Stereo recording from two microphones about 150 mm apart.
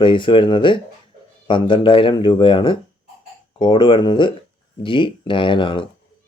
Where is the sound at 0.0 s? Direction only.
35° left (ahead or behind).